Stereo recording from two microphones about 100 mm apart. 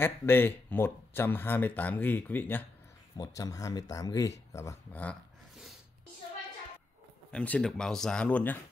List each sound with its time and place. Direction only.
0.0 s speech: 20° left (ahead or behind)
3.2 s speech: 35° left (ahead or behind)
7.2 s speech: 15° left (ahead or behind)